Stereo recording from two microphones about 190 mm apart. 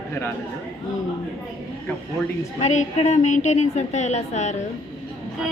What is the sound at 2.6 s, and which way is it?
A woman's voice, 35° left (ahead or behind).